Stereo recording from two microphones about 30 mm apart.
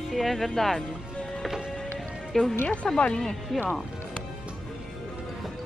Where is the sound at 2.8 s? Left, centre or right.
Left.